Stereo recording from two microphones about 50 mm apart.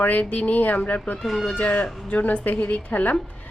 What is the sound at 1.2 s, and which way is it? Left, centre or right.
Speech, centre.